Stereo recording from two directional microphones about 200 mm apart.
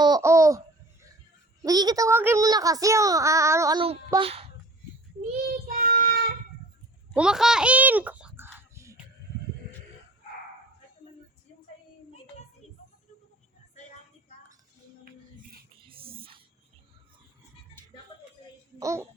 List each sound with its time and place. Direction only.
0.0 s laughter: 15° right (ahead or behind)
1.6 s speech: 20° right (ahead or behind)
4.1 s a child's voice: 30° right (ahead or behind)
5.6 s child singing: 45° right (ahead or behind)
7.1 s a sound: 5° right (ahead or behind)
15.9 s a sound: 25° right (ahead or behind)
18.8 s a child's voice: 15° right (ahead or behind)